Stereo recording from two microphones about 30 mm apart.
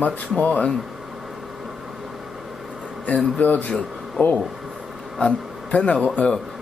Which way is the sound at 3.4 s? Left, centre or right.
Left.